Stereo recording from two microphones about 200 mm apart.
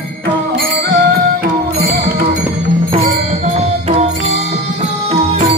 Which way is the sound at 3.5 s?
30° right (ahead or behind).